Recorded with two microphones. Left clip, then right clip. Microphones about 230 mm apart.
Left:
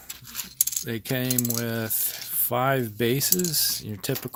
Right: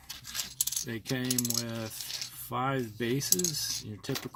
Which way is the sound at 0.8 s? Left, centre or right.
Left.